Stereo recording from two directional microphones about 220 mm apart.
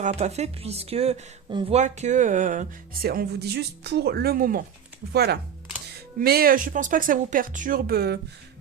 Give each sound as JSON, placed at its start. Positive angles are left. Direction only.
{"t": 0.0, "sound": "speech", "side_deg": -30}